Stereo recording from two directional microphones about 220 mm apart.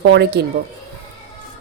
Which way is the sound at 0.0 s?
50° right (ahead or behind).